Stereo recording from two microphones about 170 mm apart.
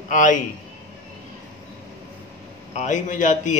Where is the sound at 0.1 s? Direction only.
50° left (ahead or behind).